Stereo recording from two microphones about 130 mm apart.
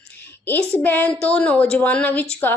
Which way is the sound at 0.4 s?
15° left (ahead or behind).